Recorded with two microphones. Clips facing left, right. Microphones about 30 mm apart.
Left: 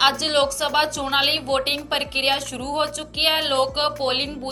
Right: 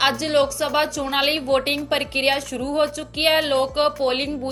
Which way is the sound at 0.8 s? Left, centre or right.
Left.